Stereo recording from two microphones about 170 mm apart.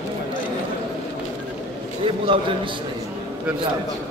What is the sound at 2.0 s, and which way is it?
Speech, 30° right (ahead or behind).